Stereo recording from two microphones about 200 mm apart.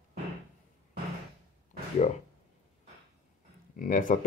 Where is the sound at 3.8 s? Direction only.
40° left (ahead or behind).